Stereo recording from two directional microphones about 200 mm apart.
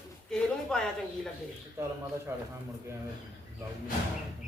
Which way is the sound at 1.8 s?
15° right (ahead or behind).